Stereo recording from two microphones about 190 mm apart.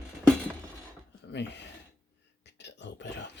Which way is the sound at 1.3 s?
65° left (ahead or behind).